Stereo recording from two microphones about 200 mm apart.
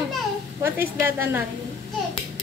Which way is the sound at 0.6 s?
10° right (ahead or behind).